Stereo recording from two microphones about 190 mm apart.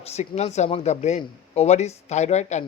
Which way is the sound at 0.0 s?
35° left (ahead or behind).